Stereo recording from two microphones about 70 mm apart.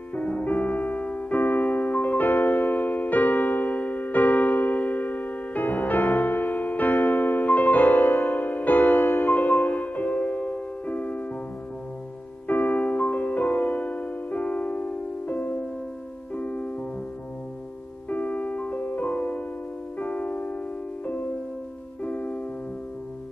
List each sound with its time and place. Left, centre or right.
0.1 s music: left
12.4 s music: left
18.1 s music: left